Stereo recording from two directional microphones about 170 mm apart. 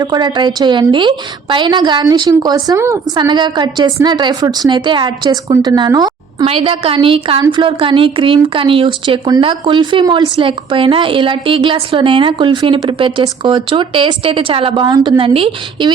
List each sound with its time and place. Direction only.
0.0 s speech: 25° right (ahead or behind)